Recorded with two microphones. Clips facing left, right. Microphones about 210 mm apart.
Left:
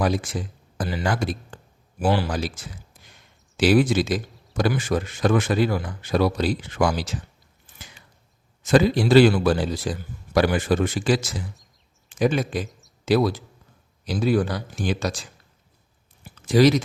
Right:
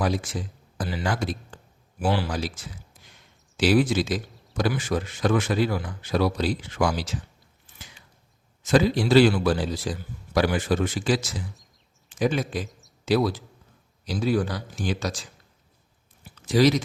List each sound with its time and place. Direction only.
0.0 s a man's voice: 55° left (ahead or behind)
3.6 s speech: 55° left (ahead or behind)
8.6 s a man's voice: 55° left (ahead or behind)
16.5 s a man's voice: 55° left (ahead or behind)